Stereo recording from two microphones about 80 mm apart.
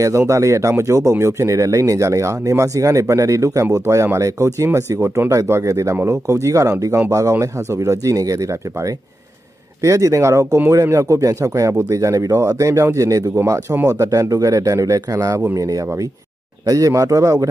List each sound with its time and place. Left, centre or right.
0.3 s speech: right
9.8 s speech: right
16.6 s speech: right